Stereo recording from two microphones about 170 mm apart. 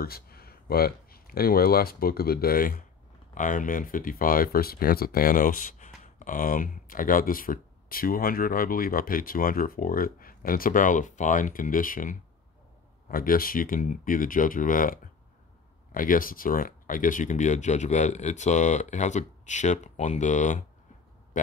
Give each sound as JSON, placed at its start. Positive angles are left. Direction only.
{"t": 0.0, "sound": "speech", "side_deg": 65}